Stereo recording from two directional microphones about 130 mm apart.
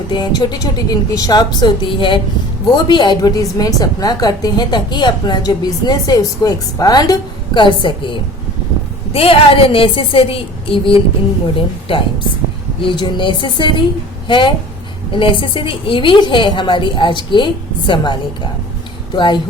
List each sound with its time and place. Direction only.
0.1 s a woman's voice: 35° left (ahead or behind)